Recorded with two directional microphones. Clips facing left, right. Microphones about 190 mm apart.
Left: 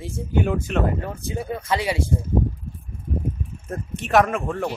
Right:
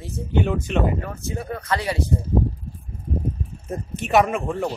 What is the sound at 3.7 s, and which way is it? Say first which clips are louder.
Speech: even; 5° right (ahead or behind).